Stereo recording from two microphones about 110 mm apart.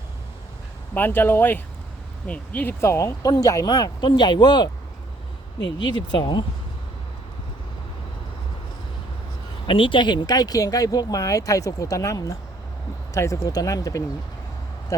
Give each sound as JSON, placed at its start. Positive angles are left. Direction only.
{"t": 0.9, "sound": "speech", "side_deg": 20}
{"t": 2.8, "sound": "speech", "side_deg": 25}
{"t": 6.1, "sound": "speech", "side_deg": 45}
{"t": 9.6, "sound": "speech", "side_deg": 50}